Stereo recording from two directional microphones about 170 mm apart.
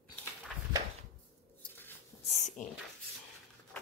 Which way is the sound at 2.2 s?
40° left (ahead or behind).